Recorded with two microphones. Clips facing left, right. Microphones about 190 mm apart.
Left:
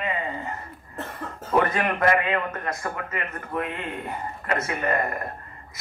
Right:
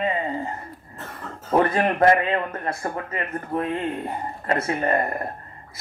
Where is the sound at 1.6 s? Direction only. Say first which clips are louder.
Right 3 dB; 30° right (ahead or behind).